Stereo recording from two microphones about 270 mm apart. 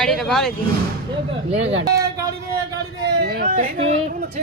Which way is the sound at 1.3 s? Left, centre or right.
Right.